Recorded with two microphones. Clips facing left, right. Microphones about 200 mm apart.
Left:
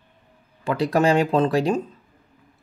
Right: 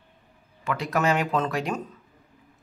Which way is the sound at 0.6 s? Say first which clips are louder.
Left 6 dB; 30° left (ahead or behind).